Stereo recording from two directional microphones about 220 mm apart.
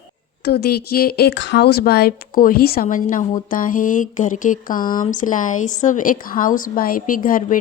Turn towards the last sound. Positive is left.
turn(degrees=40)  # may be behind; listen again after turning